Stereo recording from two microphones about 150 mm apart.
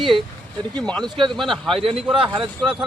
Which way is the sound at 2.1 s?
35° right (ahead or behind).